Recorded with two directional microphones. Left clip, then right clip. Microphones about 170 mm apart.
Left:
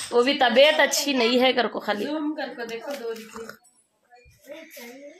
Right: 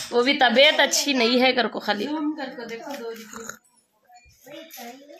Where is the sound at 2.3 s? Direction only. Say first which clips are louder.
Left 1 dB; 20° left (ahead or behind).